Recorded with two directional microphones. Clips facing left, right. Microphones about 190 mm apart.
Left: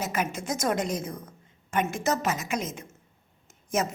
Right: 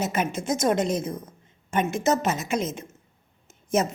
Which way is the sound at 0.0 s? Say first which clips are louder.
Right 4 dB; 25° right (ahead or behind).